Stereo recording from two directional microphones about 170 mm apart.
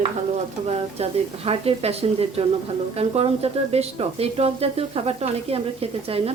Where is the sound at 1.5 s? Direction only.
35° right (ahead or behind).